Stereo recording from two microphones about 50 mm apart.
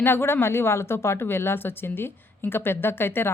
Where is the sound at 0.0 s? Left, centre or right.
Left.